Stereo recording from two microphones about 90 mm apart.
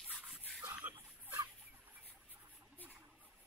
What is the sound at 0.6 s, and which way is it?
Chicken, 20° right (ahead or behind).